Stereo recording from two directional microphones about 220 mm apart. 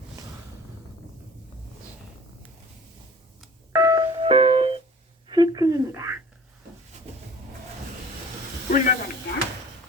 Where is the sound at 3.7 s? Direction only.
15° right (ahead or behind).